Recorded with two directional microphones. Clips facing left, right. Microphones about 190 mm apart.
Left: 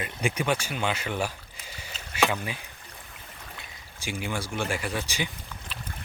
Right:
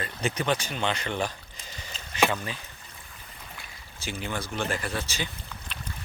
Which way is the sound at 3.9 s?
10° left (ahead or behind).